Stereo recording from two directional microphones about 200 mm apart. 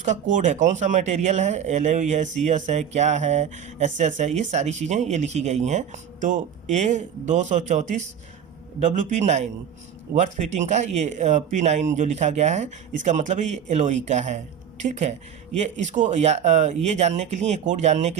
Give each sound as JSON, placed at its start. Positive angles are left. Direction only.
{"t": 0.0, "sound": "speech", "side_deg": -40}